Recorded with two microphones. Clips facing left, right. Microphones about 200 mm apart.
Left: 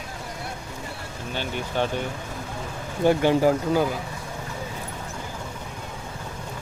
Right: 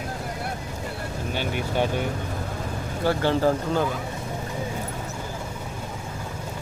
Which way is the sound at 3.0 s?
15° left (ahead or behind).